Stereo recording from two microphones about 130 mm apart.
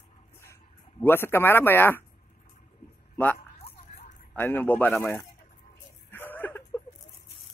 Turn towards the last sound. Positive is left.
turn(degrees=15)  # may be behind; listen again after turning